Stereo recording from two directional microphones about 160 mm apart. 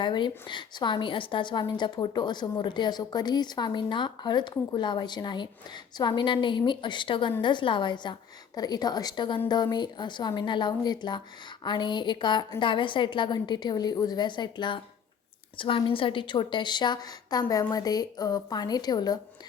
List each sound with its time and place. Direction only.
0.0 s a woman's voice: 30° left (ahead or behind)